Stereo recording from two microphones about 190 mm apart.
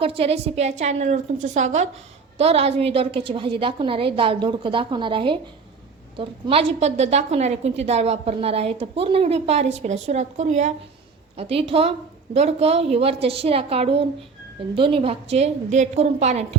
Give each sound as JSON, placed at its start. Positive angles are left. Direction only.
{"t": 0.0, "sound": "a woman's voice", "side_deg": -30}